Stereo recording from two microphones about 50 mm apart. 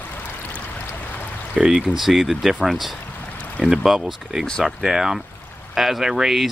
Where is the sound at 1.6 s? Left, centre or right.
Centre.